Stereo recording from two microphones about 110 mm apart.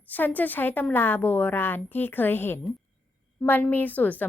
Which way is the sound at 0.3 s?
15° left (ahead or behind).